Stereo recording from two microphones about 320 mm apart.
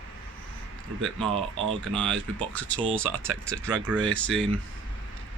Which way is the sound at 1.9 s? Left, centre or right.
Centre.